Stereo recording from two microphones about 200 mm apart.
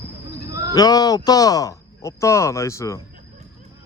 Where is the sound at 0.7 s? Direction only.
20° left (ahead or behind).